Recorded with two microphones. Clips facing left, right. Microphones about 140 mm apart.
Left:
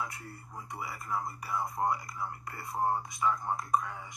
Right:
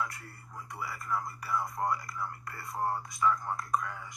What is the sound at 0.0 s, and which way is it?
Speech, 25° left (ahead or behind).